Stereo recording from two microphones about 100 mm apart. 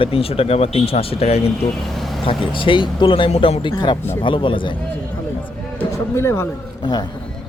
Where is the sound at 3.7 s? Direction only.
45° left (ahead or behind).